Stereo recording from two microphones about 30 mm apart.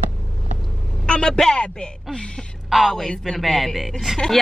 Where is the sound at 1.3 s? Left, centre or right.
Centre.